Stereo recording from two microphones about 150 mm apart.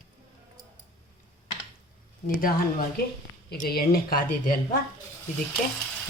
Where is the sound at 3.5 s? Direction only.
90° left; by 4.6 s 75° left (ahead or behind).